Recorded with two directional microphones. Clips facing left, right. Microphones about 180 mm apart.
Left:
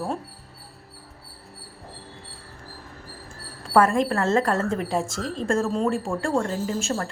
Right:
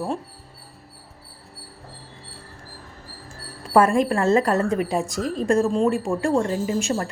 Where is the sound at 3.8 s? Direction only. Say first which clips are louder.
Right 2 dB; 20° right (ahead or behind).